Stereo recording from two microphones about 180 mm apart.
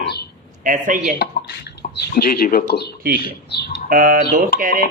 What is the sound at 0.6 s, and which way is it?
Speech, 45° right (ahead or behind).